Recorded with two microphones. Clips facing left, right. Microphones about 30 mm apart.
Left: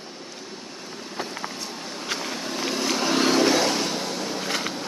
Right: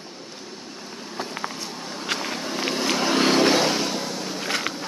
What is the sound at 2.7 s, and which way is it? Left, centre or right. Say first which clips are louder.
Vehicle: right 1 dB; centre.